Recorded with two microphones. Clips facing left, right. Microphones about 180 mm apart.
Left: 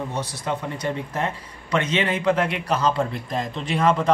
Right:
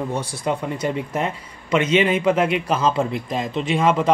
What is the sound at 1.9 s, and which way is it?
Speech, 10° right (ahead or behind).